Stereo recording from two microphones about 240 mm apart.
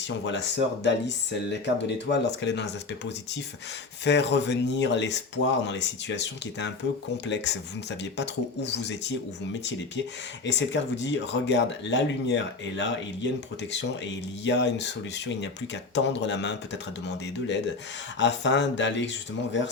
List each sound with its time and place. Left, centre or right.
0.3 s speech: left
18.2 s speech: left